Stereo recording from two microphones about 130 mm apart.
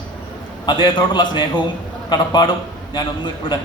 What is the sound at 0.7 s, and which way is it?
A man's voice, 40° left (ahead or behind).